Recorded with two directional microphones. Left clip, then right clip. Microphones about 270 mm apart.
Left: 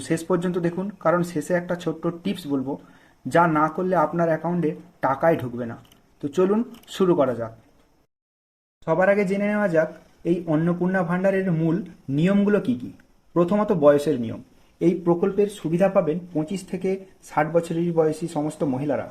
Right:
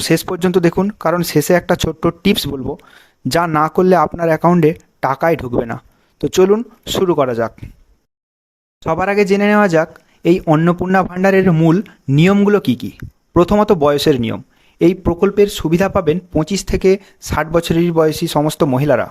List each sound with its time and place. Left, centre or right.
0.1 s a man's voice: right
8.8 s a man's voice: right